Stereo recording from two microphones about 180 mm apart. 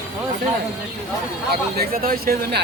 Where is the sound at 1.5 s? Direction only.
55° right (ahead or behind).